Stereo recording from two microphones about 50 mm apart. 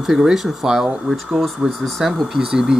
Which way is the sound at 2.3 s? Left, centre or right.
Centre.